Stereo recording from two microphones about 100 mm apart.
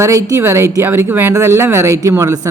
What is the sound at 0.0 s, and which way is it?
Speech, 30° right (ahead or behind).